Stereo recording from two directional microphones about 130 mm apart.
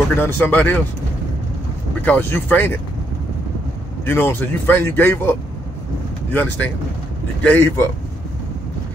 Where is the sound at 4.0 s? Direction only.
15° left (ahead or behind).